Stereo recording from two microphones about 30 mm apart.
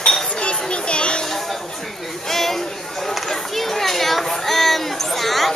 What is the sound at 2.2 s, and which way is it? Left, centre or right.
Chatter, centre.